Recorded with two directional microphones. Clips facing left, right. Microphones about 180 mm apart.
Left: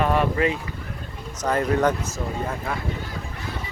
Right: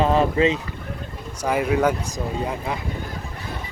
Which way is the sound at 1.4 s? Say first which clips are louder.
Right 1 dB; 10° right (ahead or behind).